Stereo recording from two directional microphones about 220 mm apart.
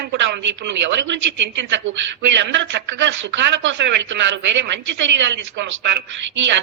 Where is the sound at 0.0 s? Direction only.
50° right (ahead or behind).